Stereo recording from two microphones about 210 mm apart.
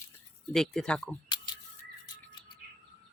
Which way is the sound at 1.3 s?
20° left (ahead or behind).